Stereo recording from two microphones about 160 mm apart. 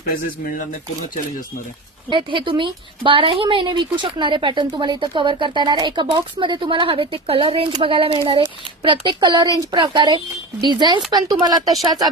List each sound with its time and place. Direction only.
0.1 s speech: 60° left (ahead or behind)
2.0 s speech: 30° right (ahead or behind)